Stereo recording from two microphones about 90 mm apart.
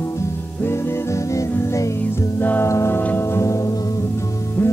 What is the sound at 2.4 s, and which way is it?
Music, 20° left (ahead or behind).